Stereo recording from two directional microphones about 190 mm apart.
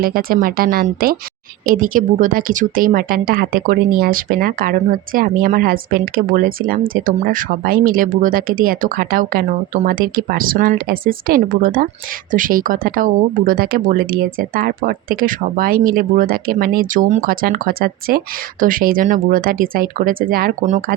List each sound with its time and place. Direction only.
0.0 s a woman's voice: 50° right (ahead or behind)